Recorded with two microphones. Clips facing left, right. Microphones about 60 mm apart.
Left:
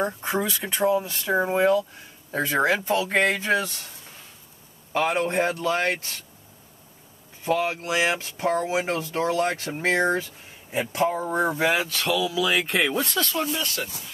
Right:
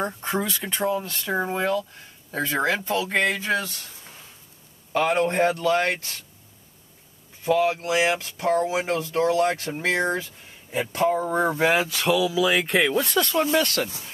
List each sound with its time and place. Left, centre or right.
0.0 s speech: centre; by 3.9 s left
4.9 s speech: centre
7.4 s speech: left
10.7 s speech: centre
13.2 s speech: right
13.5 s speech: right